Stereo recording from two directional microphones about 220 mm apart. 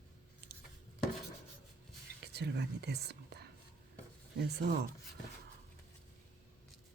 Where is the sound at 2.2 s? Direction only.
50° right (ahead or behind).